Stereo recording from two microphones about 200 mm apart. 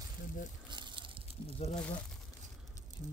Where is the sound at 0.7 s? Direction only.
20° right (ahead or behind).